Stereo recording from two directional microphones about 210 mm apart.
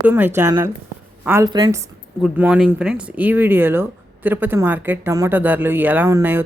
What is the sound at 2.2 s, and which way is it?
Speech, 5° right (ahead or behind).